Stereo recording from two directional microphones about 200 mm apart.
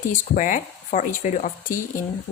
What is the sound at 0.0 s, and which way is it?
Speech, 40° left (ahead or behind).